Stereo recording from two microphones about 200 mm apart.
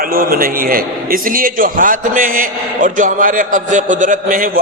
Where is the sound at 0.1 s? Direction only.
45° right (ahead or behind).